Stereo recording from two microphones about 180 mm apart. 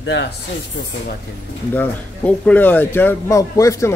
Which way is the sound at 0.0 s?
75° left (ahead or behind).